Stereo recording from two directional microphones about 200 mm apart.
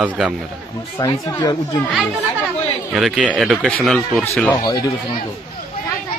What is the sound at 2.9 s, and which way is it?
Speech, centre (ahead or behind).